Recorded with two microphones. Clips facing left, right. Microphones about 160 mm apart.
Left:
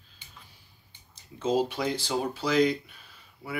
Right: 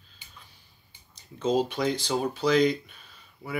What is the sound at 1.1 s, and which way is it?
Speech, 5° left (ahead or behind).